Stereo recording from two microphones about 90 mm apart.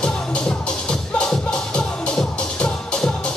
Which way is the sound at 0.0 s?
10° left (ahead or behind).